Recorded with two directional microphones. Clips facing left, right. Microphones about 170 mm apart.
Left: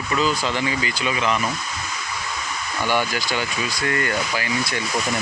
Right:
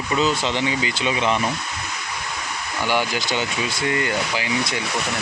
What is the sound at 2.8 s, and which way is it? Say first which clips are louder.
Speech: even; 15° right (ahead or behind).